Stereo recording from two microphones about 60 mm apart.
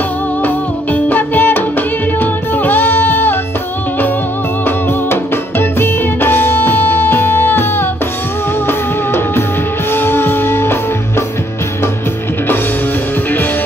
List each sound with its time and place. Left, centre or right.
0.4 s music: left
4.6 s music: left